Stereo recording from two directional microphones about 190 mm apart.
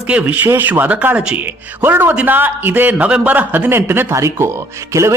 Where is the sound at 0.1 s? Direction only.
5° right (ahead or behind).